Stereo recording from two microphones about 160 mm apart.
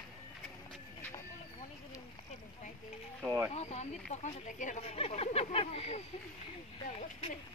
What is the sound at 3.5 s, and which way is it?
Speech, 45° left (ahead or behind).